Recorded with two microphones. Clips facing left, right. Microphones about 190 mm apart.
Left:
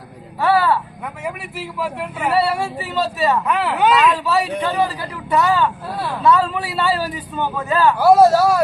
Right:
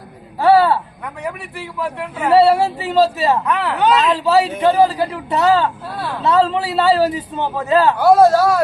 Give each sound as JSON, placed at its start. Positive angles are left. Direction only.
{"t": 0.3, "sound": "speech", "side_deg": -30}
{"t": 1.2, "sound": "speech", "side_deg": 5}
{"t": 2.3, "sound": "a man's voice", "side_deg": -25}
{"t": 3.4, "sound": "speech", "side_deg": 5}
{"t": 4.0, "sound": "a man's voice", "side_deg": -30}
{"t": 7.9, "sound": "speech", "side_deg": 5}